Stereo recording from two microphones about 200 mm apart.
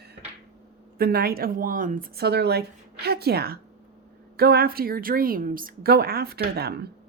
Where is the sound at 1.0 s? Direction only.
50° right (ahead or behind).